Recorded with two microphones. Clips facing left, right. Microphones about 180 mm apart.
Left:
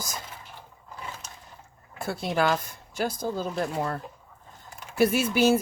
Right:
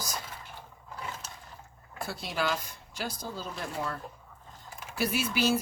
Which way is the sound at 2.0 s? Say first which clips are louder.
Left 7 dB; 50° left (ahead or behind).